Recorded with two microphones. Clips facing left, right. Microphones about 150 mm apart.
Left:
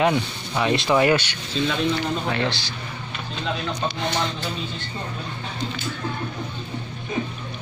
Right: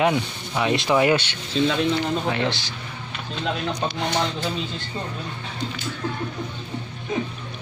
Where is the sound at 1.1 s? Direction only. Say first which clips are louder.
Even; 25° right (ahead or behind).